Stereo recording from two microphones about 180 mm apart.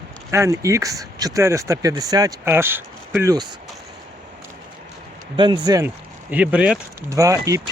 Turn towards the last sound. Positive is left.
turn(degrees=-15)  # may be behind; listen again after turning